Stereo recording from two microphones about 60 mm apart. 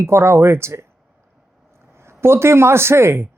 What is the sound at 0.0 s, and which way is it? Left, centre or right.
Speech, right.